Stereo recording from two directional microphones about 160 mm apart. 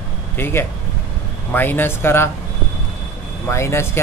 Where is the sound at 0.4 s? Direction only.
15° left (ahead or behind).